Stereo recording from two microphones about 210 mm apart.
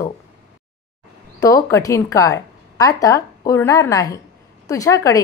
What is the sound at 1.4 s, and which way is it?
A woman's voice, 15° left (ahead or behind).